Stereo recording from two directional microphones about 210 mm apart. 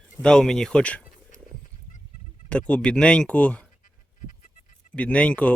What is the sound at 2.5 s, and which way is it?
Speech, 5° left (ahead or behind).